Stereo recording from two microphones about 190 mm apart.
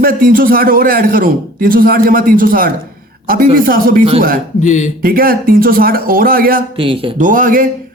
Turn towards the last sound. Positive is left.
turn(degrees=-45)  # may be behind; listen again after turning